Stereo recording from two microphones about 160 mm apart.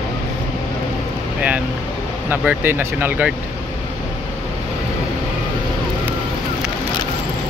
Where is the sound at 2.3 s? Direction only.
10° right (ahead or behind).